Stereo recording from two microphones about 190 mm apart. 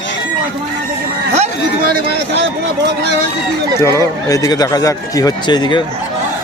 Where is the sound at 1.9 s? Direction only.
60° right (ahead or behind).